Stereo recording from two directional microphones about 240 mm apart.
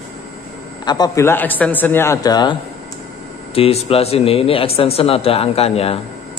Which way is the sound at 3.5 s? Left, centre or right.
Left.